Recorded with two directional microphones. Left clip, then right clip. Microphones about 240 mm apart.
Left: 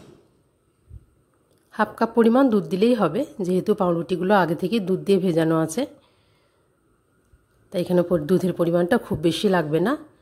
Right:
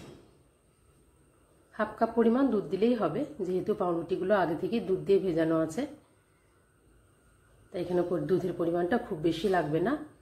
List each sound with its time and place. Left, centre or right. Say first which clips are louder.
1.7 s a woman's voice: left 7 dB; left
7.7 s a woman's voice: left 9 dB; left